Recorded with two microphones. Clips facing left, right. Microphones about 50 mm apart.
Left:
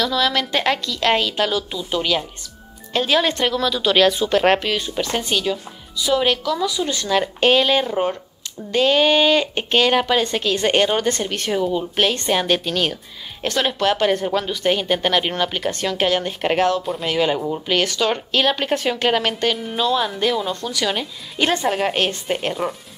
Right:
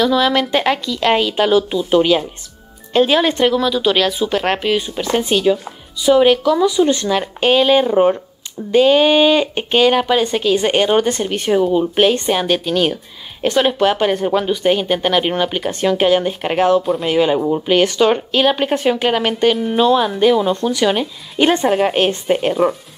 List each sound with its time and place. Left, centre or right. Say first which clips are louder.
0.0 s speech: right 5 dB; centre
1.5 s speech: right 9 dB; right; by 4.6 s centre
4.6 s speech: right 4 dB; centre
5.9 s speech: right 7 dB; right
7.1 s speech: right 1 dB; centre
17.1 s speech: right 5 dB; centre
18.1 s speech: right 4 dB; centre